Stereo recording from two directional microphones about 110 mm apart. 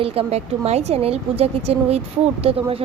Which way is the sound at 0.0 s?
60° right (ahead or behind).